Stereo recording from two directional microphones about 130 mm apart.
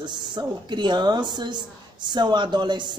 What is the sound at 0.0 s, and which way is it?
A woman's voice, 35° right (ahead or behind).